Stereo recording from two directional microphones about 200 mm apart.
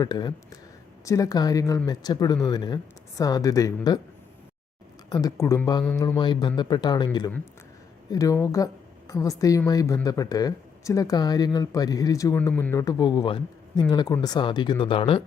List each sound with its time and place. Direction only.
0.0 s speech: 20° left (ahead or behind)
5.0 s a woman's voice: 15° left (ahead or behind)